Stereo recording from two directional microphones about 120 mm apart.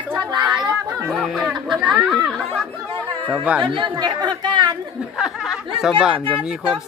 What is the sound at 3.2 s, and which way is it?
Speech, 10° right (ahead or behind).